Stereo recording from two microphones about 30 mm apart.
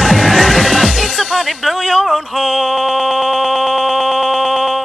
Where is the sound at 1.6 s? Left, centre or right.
Centre.